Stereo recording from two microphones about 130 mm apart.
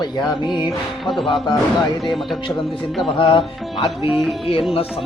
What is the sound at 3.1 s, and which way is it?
Speech, 45° left (ahead or behind).